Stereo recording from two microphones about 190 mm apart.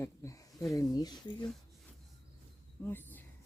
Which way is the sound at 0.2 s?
15° left (ahead or behind).